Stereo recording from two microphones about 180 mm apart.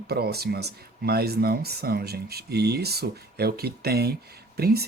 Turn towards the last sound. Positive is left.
turn(degrees=-60)  # may be behind; listen again after turning